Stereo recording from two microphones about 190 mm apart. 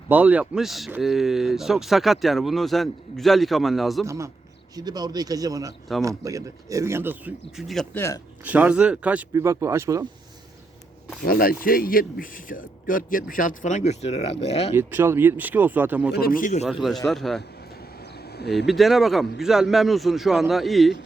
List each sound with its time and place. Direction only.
0.1 s speech: 10° right (ahead or behind)
4.0 s a man's voice: 15° right (ahead or behind)
7.9 s speech: 15° left (ahead or behind)
8.4 s speech: 10° right (ahead or behind)
11.2 s a man's voice: 50° left (ahead or behind); by 14.7 s 30° left (ahead or behind)
14.8 s speech: 10° right (ahead or behind)
16.1 s a man's voice: 50° left (ahead or behind)
17.1 s speech: centre (ahead or behind)
18.2 s a sound: 55° left (ahead or behind)
18.5 s speech: centre (ahead or behind)